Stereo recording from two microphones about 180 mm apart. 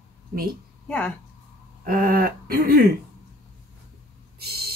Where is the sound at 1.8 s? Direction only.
55° right (ahead or behind).